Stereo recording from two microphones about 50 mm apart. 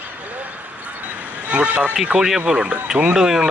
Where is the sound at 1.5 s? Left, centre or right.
Right.